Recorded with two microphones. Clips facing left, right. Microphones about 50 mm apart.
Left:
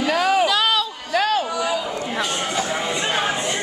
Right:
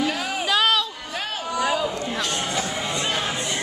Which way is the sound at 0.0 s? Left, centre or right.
Left.